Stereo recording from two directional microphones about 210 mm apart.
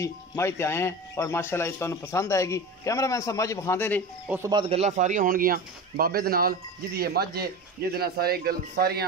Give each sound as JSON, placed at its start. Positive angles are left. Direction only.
{"t": 0.0, "sound": "speech", "side_deg": 15}
{"t": 4.3, "sound": "speech", "side_deg": -15}